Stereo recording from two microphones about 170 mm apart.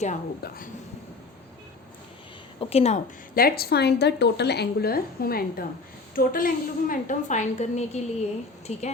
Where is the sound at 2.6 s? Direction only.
35° left (ahead or behind).